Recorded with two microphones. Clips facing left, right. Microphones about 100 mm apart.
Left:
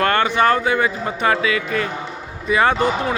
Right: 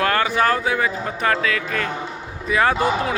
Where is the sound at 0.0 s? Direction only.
Centre (ahead or behind).